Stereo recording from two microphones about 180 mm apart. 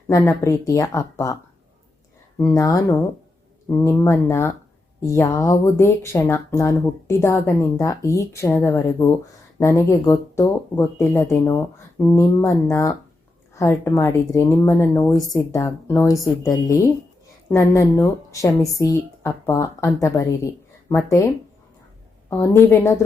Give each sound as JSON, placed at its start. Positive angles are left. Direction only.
{"t": 0.1, "sound": "speech", "side_deg": 15}
{"t": 2.4, "sound": "speech", "side_deg": 20}
{"t": 22.3, "sound": "speech", "side_deg": 15}